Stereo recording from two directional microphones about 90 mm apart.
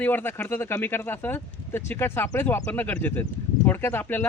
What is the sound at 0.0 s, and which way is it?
Speech, 20° left (ahead or behind).